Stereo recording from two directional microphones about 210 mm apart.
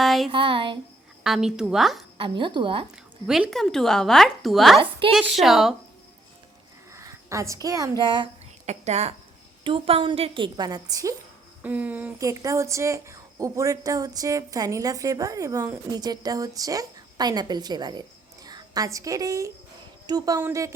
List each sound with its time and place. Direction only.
0.0 s a sound: centre (ahead or behind)
0.3 s a woman's voice: 25° right (ahead or behind)
1.2 s speech: centre (ahead or behind)
2.1 s a woman's voice: 25° right (ahead or behind)
3.2 s speech: centre (ahead or behind)
4.8 s a woman's voice: 25° right (ahead or behind)
5.1 s speech: centre (ahead or behind)
6.9 s speech: 15° right (ahead or behind)
8.6 s a woman's voice: 35° right (ahead or behind); by 11.1 s 15° right (ahead or behind)
11.6 s a woman's voice: 5° right (ahead or behind)